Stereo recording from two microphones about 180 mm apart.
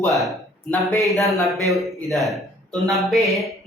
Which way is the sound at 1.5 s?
20° right (ahead or behind).